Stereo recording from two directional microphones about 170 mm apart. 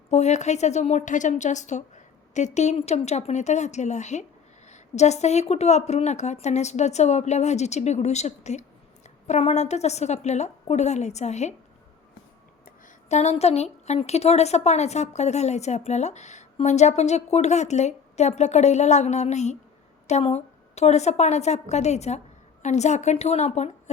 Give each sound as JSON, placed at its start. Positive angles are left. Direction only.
{"t": 0.1, "sound": "a woman's voice", "side_deg": 40}
{"t": 12.6, "sound": "a woman's voice", "side_deg": 45}